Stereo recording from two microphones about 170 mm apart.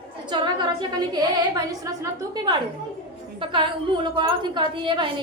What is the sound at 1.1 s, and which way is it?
A woman's voice, 20° right (ahead or behind).